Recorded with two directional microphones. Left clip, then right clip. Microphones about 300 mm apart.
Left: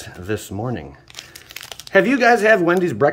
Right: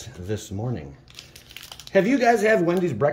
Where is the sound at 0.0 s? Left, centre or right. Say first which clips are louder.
Left 6 dB; centre.